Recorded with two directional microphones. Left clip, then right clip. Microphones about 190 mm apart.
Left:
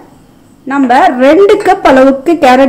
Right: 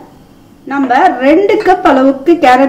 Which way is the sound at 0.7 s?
55° left (ahead or behind).